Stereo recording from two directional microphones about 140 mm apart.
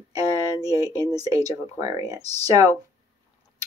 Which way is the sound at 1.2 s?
25° right (ahead or behind).